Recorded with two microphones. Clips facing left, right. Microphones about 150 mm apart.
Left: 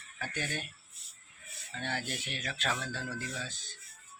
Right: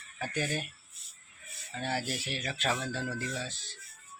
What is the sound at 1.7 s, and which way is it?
Speech, 5° right (ahead or behind).